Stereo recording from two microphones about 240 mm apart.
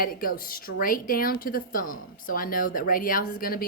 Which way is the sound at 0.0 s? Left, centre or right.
Left.